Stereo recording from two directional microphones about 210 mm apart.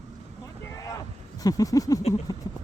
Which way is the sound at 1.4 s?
15° left (ahead or behind).